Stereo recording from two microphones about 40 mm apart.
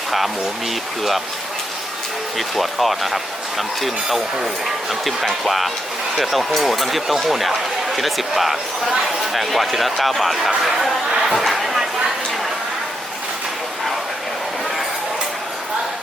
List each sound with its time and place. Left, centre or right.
2.6 s speech: centre
11.4 s chatter: centre